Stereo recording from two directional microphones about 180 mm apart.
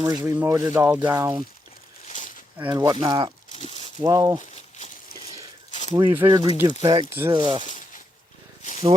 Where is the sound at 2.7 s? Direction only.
20° right (ahead or behind).